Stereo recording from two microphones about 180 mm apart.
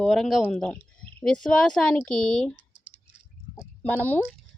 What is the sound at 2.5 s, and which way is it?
Computer keyboard, 30° right (ahead or behind).